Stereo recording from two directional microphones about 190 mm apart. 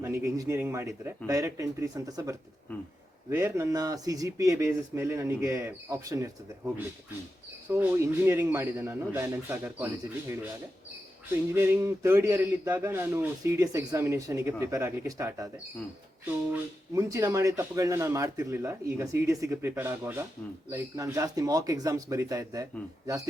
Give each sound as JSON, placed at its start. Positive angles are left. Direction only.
{"t": 0.0, "sound": "speech", "side_deg": -15}
{"t": 7.7, "sound": "speech", "side_deg": -15}
{"t": 11.5, "sound": "speech", "side_deg": -10}
{"t": 16.5, "sound": "speech", "side_deg": -15}